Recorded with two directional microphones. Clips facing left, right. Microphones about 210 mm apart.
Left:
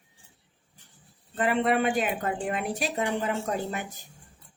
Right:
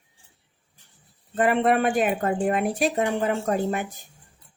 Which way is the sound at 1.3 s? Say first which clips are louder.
Right 4 dB; 50° right (ahead or behind).